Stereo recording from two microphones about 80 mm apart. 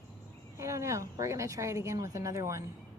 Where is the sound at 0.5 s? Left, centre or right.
Right.